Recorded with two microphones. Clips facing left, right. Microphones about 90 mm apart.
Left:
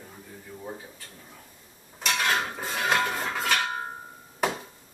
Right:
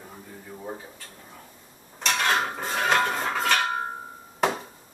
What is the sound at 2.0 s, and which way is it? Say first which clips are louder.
Mechanisms: right 2 dB; 5° left (ahead or behind).